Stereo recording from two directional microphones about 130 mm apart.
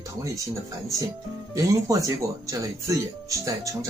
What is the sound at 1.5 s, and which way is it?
Speech, 25° right (ahead or behind).